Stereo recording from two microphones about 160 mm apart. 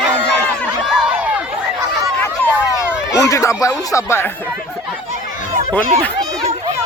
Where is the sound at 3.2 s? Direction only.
20° left (ahead or behind).